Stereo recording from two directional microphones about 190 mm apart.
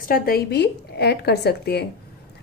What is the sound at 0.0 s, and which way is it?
A woman's voice, 50° left (ahead or behind).